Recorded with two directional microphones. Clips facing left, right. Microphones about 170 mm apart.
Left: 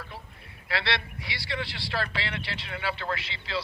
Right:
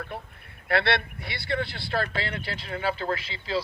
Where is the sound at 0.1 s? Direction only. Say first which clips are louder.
Right 6 dB; 60° right (ahead or behind).